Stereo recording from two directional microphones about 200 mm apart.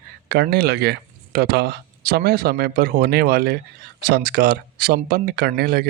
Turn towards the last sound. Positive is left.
turn(degrees=-50)  # may be behind; listen again after turning